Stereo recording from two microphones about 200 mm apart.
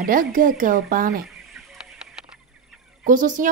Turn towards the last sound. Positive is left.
turn(degrees=-40)  # may be behind; listen again after turning